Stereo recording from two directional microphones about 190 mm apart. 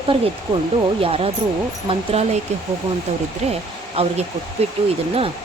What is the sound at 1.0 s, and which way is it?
Speech, 30° right (ahead or behind).